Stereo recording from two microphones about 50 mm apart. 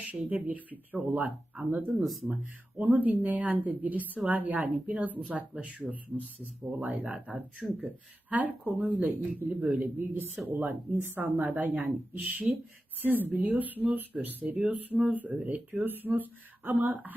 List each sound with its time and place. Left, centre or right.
0.0 s speech: right
1.9 s speech: centre
2.7 s speech: right
7.6 s speech: centre
8.3 s speech: right
13.2 s speech: right